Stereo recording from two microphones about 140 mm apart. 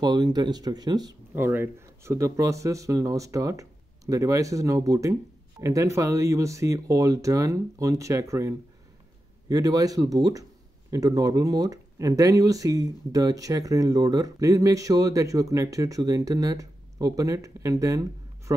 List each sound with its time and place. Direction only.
0.0 s speech: 30° right (ahead or behind)
1.3 s speech: 15° right (ahead or behind)